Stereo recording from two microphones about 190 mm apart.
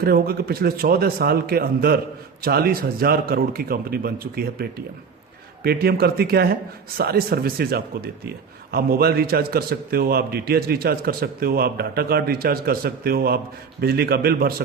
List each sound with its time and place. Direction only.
0.0 s a man's voice: 55° right (ahead or behind)